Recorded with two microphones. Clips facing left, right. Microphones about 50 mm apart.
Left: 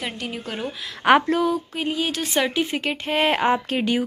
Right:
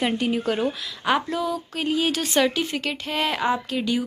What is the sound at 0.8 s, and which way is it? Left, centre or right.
Speech, left.